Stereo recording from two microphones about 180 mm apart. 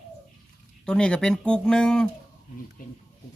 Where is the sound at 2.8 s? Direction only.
50° left (ahead or behind).